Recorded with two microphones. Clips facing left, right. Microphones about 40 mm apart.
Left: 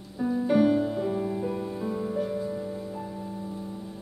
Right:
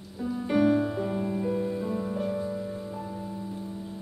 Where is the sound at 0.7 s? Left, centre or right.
Centre.